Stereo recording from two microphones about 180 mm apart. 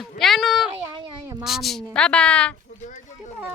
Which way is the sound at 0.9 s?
20° right (ahead or behind).